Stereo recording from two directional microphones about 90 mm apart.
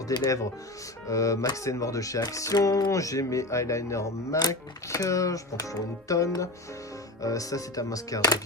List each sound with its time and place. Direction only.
0.1 s speech: 40° left (ahead or behind)